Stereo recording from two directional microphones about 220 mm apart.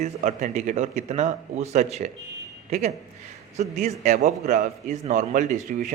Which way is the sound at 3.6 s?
35° right (ahead or behind).